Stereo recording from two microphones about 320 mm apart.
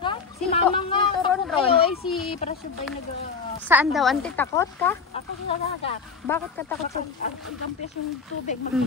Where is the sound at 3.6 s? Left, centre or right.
Centre.